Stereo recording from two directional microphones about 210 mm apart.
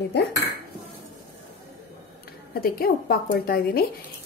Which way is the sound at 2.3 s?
45° left (ahead or behind).